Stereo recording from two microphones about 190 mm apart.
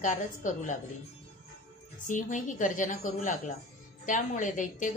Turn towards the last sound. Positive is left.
turn(degrees=40)  # may be behind; listen again after turning